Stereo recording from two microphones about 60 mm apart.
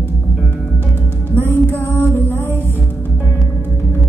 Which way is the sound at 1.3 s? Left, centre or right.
Left.